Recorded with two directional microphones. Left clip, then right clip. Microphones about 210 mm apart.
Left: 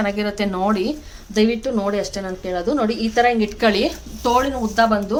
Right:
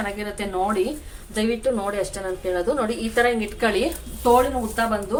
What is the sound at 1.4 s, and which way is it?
A woman's voice, 35° left (ahead or behind).